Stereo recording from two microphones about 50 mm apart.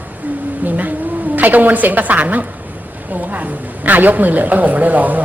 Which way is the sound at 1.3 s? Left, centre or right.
Right.